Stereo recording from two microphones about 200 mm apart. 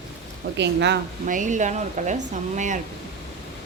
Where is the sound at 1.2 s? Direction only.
40° right (ahead or behind).